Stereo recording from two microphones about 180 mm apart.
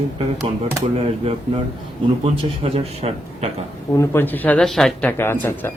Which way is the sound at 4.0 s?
10° left (ahead or behind).